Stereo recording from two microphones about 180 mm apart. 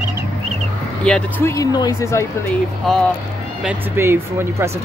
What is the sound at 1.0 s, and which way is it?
Speech, 10° left (ahead or behind).